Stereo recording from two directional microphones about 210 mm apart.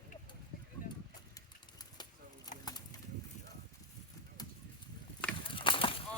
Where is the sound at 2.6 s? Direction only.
20° left (ahead or behind).